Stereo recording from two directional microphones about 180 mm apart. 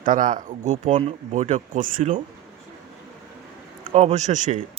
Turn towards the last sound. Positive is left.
turn(degrees=-40)  # may be behind; listen again after turning